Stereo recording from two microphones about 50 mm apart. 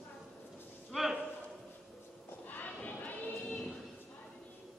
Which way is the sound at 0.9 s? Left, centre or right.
Centre.